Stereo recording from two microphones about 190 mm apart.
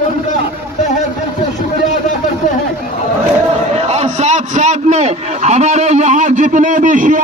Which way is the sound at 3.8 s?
35° right (ahead or behind).